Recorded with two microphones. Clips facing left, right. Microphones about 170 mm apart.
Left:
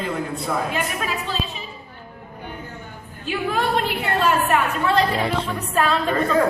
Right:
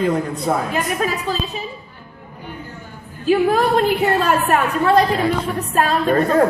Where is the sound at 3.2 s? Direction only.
40° right (ahead or behind).